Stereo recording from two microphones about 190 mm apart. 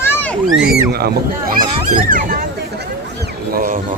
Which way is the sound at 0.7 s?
55° right (ahead or behind).